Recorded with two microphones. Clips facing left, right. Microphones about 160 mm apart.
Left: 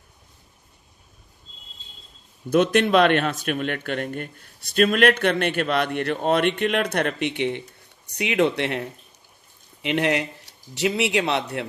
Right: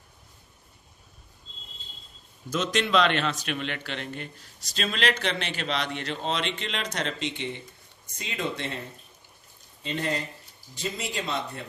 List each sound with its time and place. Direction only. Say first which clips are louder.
2.5 s a man's voice: left 7 dB; 60° left (ahead or behind); by 11.6 s 75° left (ahead or behind)